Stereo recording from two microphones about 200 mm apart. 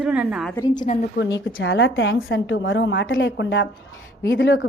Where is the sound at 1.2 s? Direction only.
65° left (ahead or behind).